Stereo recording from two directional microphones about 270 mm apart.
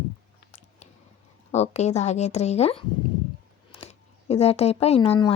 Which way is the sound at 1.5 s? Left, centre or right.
Left.